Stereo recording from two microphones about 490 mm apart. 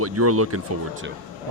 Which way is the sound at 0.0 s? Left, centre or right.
Right.